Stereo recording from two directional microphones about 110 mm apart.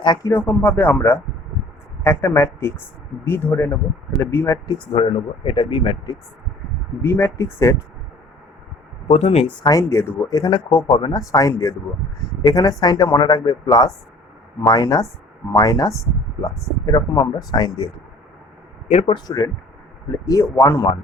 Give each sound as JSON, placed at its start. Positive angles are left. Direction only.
{"t": 0.0, "sound": "speech", "side_deg": 40}
{"t": 0.3, "sound": "speech", "side_deg": 20}
{"t": 4.6, "sound": "speech", "side_deg": 55}
{"t": 7.0, "sound": "speech", "side_deg": 25}
{"t": 9.0, "sound": "speech", "side_deg": 75}
{"t": 9.6, "sound": "speech", "side_deg": 30}
{"t": 10.3, "sound": "speech", "side_deg": 40}
{"t": 10.8, "sound": "speech", "side_deg": 55}
{"t": 11.1, "sound": "speech", "side_deg": 30}
{"t": 18.9, "sound": "speech", "side_deg": 70}
{"t": 19.1, "sound": "speech", "side_deg": 35}